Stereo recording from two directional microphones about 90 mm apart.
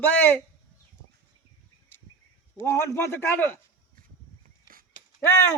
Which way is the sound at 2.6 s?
30° left (ahead or behind).